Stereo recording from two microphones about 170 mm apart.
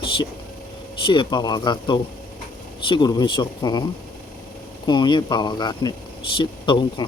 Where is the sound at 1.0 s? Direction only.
30° left (ahead or behind).